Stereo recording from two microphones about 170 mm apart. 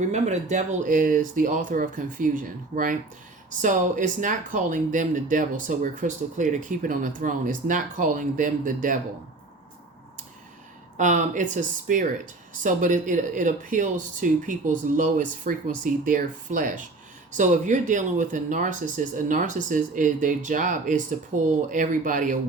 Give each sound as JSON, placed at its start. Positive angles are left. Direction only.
{"t": 0.1, "sound": "speech", "side_deg": -45}
{"t": 10.9, "sound": "speech", "side_deg": -45}